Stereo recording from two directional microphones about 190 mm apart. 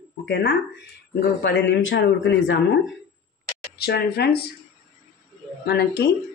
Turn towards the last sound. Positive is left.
turn(degrees=60)  # may be behind; listen again after turning